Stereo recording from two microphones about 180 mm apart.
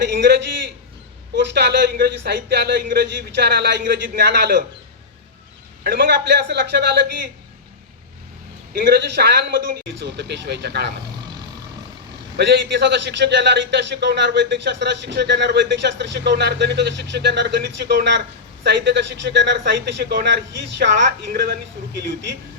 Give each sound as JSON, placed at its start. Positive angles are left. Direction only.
{"t": 0.1, "sound": "a man's voice", "side_deg": -70}
{"t": 1.4, "sound": "a man's voice", "side_deg": -70}
{"t": 5.8, "sound": "a man's voice", "side_deg": -55}
{"t": 8.7, "sound": "a man's voice", "side_deg": -60}
{"t": 12.4, "sound": "a man's voice", "side_deg": -70}